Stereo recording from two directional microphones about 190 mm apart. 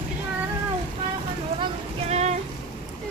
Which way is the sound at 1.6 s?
35° right (ahead or behind).